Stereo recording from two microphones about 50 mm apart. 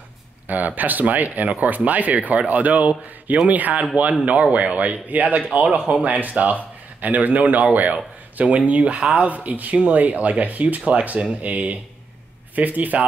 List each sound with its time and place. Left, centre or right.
0.5 s speech: right